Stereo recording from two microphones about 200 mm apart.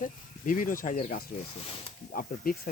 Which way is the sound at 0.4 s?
40° left (ahead or behind).